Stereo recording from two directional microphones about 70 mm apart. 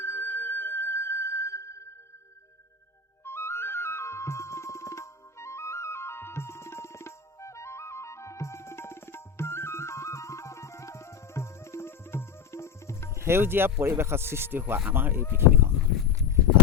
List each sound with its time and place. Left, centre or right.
0.0 s music: left
3.2 s flute: left
13.1 s speech: right